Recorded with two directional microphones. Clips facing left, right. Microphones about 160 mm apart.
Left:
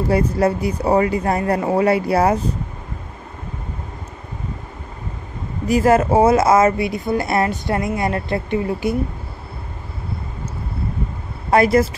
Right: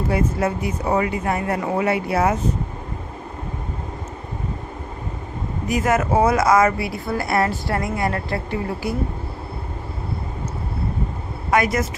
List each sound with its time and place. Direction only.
0.1 s speech: 35° left (ahead or behind)
5.7 s speech: 30° left (ahead or behind)
11.5 s speech: 30° left (ahead or behind)